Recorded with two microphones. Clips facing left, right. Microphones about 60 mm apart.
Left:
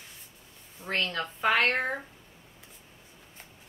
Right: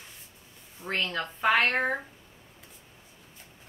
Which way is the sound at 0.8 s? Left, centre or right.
Centre.